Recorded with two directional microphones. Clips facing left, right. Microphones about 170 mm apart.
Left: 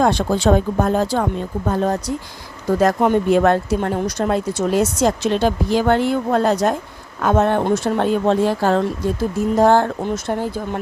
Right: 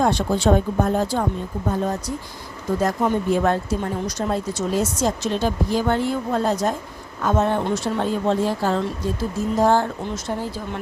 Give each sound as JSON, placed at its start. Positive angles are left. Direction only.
{"t": 0.0, "sound": "speech", "side_deg": 90}
{"t": 1.6, "sound": "speech", "side_deg": 75}